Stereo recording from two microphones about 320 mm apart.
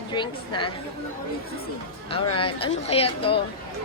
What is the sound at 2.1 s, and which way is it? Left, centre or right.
A woman's voice, centre.